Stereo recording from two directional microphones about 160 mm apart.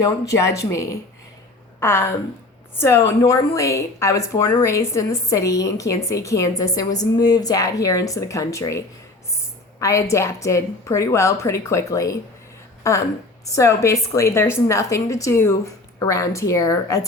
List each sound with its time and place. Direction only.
0.0 s speech: 20° left (ahead or behind)
9.8 s speech: 20° left (ahead or behind)